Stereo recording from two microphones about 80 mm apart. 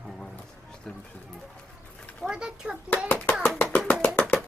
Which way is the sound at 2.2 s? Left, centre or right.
Centre.